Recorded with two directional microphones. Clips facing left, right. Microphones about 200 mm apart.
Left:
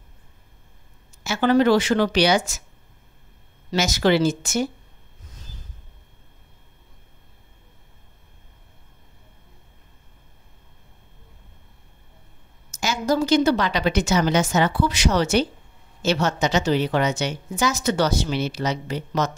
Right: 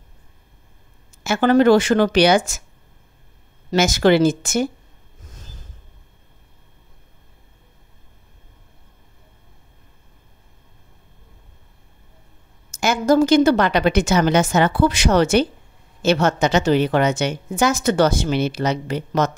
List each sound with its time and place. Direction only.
1.2 s a woman's voice: 50° right (ahead or behind)
3.7 s a woman's voice: 50° right (ahead or behind)
12.7 s a woman's voice: 55° right (ahead or behind)